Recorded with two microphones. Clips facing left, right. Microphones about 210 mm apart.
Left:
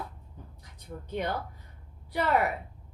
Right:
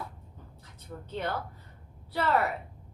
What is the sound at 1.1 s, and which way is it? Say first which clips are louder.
A woman's voice: left 2 dB; 15° left (ahead or behind).